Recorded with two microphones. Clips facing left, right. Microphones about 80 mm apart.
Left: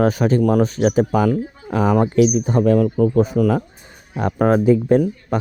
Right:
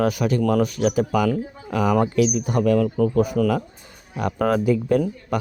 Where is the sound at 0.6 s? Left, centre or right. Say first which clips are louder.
Left 4 dB; left.